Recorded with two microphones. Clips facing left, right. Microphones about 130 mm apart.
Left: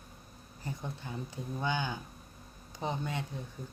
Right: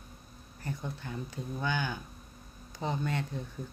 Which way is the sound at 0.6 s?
15° left (ahead or behind).